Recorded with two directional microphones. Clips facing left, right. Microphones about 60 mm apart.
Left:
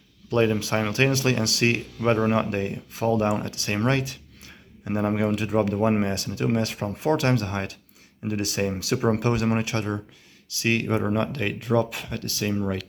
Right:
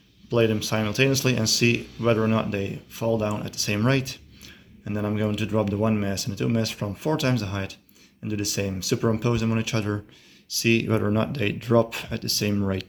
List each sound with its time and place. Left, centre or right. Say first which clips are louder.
0.6 s speech: even; left
2.6 s speech: left 2 dB; left
3.7 s speech: right 1 dB; left
5.5 s speech: left 2 dB; left; by 12.2 s centre
12.2 s speech: right 1 dB; centre
12.5 s speech: right 1 dB; centre